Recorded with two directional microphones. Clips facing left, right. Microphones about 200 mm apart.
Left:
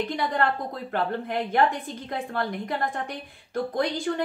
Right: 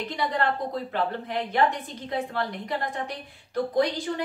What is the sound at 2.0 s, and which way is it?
Speech, 50° left (ahead or behind).